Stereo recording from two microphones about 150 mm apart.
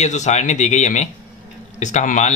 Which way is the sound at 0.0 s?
50° left (ahead or behind).